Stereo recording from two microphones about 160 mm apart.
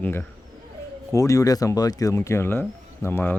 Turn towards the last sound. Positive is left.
turn(degrees=15)  # may be behind; listen again after turning